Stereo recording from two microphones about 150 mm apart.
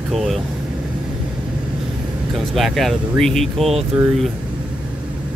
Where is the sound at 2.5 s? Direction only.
Centre (ahead or behind).